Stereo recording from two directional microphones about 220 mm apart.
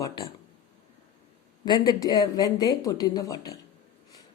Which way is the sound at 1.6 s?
20° left (ahead or behind).